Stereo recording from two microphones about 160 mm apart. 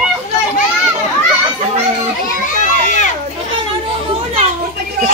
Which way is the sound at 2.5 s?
50° left (ahead or behind).